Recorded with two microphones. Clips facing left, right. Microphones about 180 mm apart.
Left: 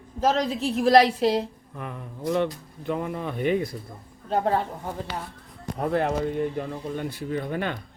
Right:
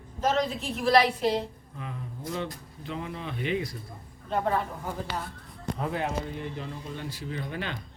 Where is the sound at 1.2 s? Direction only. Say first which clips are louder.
Left 4 dB; 75° left (ahead or behind); by 3.7 s 50° left (ahead or behind).